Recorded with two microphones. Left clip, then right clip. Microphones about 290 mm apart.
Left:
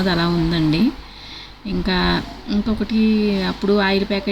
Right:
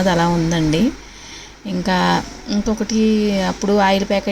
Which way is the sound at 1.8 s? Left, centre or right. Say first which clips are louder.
Right 3 dB; centre.